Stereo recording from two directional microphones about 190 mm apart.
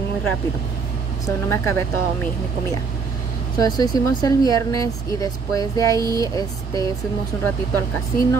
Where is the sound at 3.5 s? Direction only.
20° left (ahead or behind).